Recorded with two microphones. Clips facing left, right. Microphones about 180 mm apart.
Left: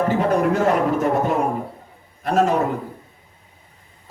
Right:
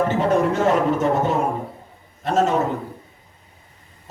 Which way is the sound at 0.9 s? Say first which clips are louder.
Even; 25° right (ahead or behind).